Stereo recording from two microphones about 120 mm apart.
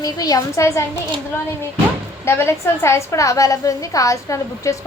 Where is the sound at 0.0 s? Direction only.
30° left (ahead or behind).